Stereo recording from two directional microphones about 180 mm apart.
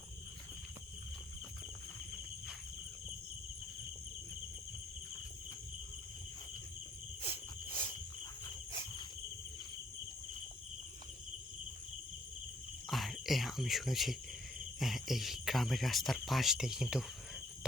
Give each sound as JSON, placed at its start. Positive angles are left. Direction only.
{"t": 7.2, "sound": "cricket", "side_deg": 30}
{"t": 8.7, "sound": "insect", "side_deg": 25}
{"t": 12.9, "sound": "speech", "side_deg": 0}